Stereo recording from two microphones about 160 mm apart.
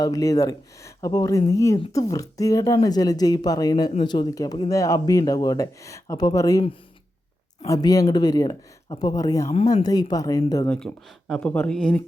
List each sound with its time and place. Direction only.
0.0 s speech: 20° left (ahead or behind)
7.7 s speech: 20° left (ahead or behind)
10.7 s speech: 5° left (ahead or behind)